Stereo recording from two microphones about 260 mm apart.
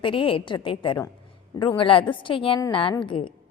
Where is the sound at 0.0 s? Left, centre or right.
Centre.